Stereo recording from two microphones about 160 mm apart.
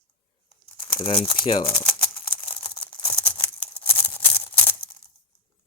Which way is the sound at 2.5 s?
35° left (ahead or behind).